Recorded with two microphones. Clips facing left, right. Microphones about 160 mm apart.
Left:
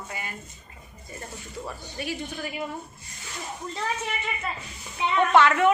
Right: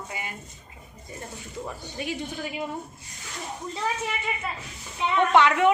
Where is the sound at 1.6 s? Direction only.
20° right (ahead or behind).